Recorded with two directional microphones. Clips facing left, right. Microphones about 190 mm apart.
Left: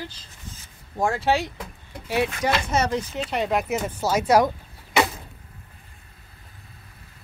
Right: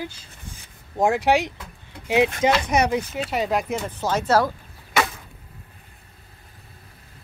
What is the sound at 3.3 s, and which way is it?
Speech, centre (ahead or behind).